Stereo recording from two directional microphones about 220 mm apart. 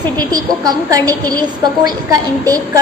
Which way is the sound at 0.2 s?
15° right (ahead or behind).